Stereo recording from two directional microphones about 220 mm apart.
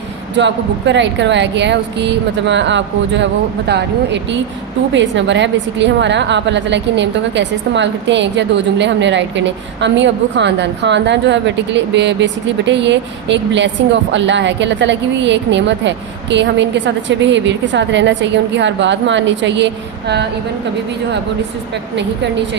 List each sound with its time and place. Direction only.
0.3 s a woman's voice: 55° right (ahead or behind)